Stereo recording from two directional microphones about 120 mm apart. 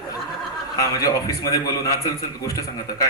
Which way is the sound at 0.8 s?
30° left (ahead or behind).